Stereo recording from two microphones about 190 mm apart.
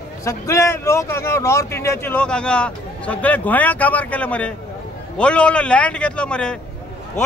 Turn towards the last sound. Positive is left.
turn(degrees=5)  # may be behind; listen again after turning